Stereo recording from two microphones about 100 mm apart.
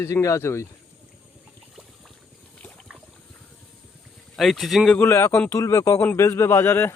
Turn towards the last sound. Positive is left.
turn(degrees=25)  # may be behind; listen again after turning